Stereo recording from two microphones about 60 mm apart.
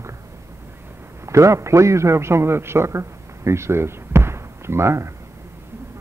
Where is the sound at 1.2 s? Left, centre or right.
Right.